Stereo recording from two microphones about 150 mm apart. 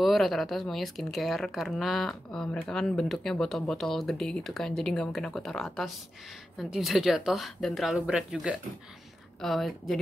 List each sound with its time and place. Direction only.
0.0 s speech: centre (ahead or behind)